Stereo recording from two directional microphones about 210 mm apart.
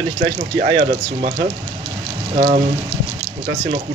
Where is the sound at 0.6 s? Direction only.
30° right (ahead or behind).